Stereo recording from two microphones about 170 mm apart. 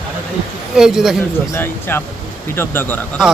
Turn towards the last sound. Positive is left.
turn(degrees=10)  # may be behind; listen again after turning